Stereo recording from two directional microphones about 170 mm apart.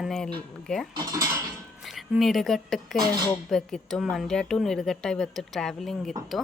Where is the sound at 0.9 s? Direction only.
20° right (ahead or behind).